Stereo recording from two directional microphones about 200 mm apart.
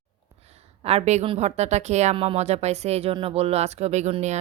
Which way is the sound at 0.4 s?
30° right (ahead or behind).